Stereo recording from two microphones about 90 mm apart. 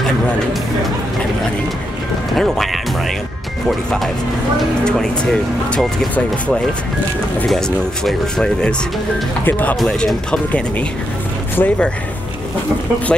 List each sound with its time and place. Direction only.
2.3 s speech: centre (ahead or behind)
6.1 s speech: 15° left (ahead or behind)
9.4 s speech: 20° left (ahead or behind)
9.8 s speech: 5° left (ahead or behind)